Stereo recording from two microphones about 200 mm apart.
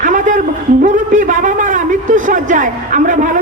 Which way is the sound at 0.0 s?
40° right (ahead or behind).